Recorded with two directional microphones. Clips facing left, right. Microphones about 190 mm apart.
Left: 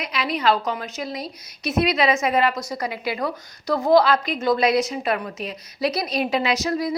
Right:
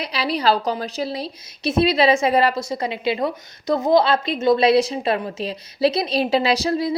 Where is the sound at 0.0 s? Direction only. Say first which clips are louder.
Right 2 dB; 35° right (ahead or behind).